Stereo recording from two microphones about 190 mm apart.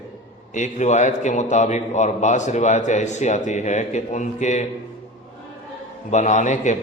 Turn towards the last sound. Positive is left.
turn(degrees=40)  # may be behind; listen again after turning